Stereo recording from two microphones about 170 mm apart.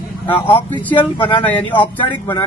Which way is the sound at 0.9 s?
30° left (ahead or behind).